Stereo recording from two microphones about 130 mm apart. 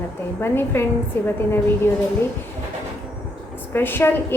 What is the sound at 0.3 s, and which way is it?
A woman's voice, 15° left (ahead or behind).